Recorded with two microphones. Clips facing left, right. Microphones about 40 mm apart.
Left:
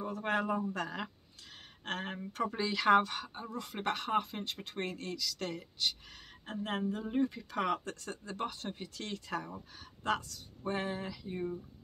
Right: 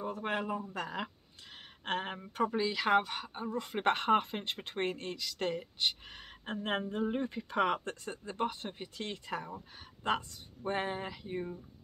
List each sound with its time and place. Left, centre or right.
0.0 s a sound: centre
0.7 s speech: centre
3.8 s speech: right